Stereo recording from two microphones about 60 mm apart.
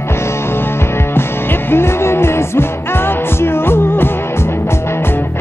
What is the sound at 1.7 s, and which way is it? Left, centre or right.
Music, left.